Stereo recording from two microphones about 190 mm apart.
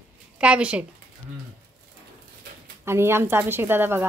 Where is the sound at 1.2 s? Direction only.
5° left (ahead or behind).